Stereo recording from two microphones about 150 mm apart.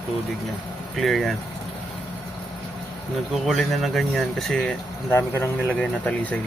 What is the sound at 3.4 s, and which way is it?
Speech, centre (ahead or behind).